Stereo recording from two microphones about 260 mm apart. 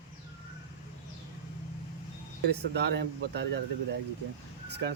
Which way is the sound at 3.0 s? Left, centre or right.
Right.